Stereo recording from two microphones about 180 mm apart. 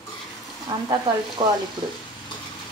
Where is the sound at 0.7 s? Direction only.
20° right (ahead or behind).